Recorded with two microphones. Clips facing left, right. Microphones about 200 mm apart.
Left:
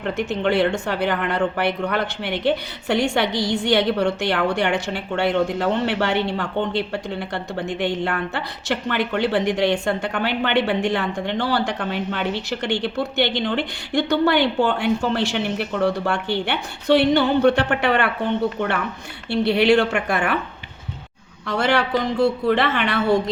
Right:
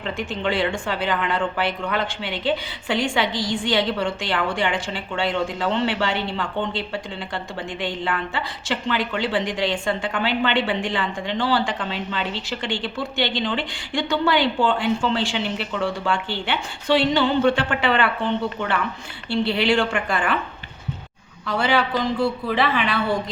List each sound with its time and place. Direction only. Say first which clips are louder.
0.0 s a woman's voice: left 4 dB; 65° left (ahead or behind)
19.3 s a woman's voice: left 4 dB; 65° left (ahead or behind)
21.6 s speech: left 1 dB; 70° left (ahead or behind)